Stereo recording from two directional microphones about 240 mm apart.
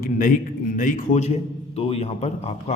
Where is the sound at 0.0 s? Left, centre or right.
Left.